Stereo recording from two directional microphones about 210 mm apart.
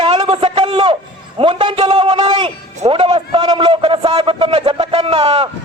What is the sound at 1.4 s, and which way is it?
A man's voice, 25° right (ahead or behind).